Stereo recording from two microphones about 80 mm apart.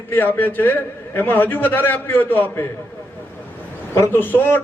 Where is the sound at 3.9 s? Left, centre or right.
Left.